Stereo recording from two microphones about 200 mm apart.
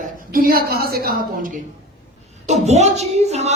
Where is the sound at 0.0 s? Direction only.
45° right (ahead or behind).